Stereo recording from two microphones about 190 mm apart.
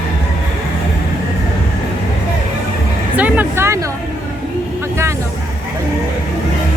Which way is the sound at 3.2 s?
10° right (ahead or behind).